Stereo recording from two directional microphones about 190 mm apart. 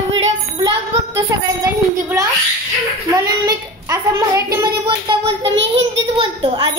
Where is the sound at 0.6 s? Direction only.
20° right (ahead or behind).